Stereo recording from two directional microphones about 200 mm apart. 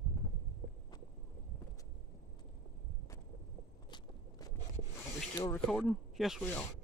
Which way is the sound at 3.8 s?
20° left (ahead or behind).